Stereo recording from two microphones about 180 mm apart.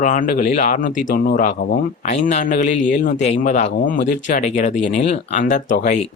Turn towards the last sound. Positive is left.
turn(degrees=45)  # may be behind; listen again after turning